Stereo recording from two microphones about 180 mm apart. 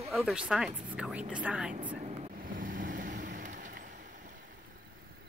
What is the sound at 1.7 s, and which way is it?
Vehicle, 40° right (ahead or behind).